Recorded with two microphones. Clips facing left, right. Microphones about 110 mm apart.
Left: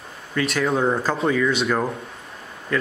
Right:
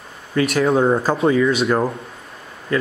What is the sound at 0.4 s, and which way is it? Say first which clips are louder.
Speech: right 5 dB; 10° right (ahead or behind).